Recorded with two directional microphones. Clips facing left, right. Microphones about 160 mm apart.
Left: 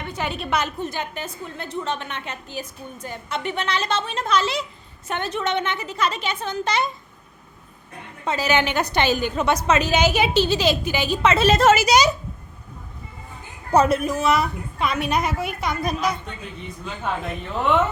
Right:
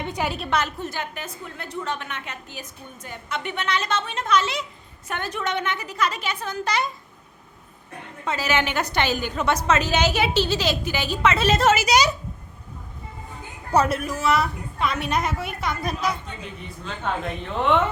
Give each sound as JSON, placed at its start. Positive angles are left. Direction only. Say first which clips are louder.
{"t": 0.0, "sound": "a sound", "louder": "right 2 dB", "side_deg": -15}
{"t": 0.3, "sound": "a woman's voice", "louder": "even", "side_deg": 0}
{"t": 0.5, "sound": "a woman's voice", "louder": "left 3 dB", "side_deg": 15}
{"t": 1.1, "sound": "a woman's voice", "louder": "left 3 dB", "side_deg": 30}
{"t": 8.2, "sound": "a woman's voice", "louder": "left 3 dB", "side_deg": 25}
{"t": 11.4, "sound": "speech", "louder": "left 4 dB", "side_deg": 50}
{"t": 11.9, "sound": "a woman's voice", "louder": "left 2 dB", "side_deg": 20}
{"t": 13.7, "sound": "a woman's voice", "louder": "left 3 dB", "side_deg": 20}
{"t": 17.1, "sound": "a woman's voice", "louder": "even", "side_deg": 5}